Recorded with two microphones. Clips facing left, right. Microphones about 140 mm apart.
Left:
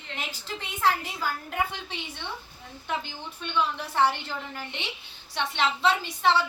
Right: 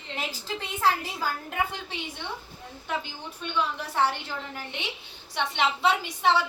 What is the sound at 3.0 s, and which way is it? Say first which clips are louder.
A woman's voice: even; 5° right (ahead or behind).